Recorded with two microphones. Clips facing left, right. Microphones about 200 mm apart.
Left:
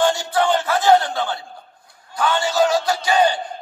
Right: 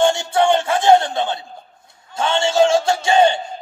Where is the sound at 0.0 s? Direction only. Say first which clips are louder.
Right 3 dB; 25° right (ahead or behind).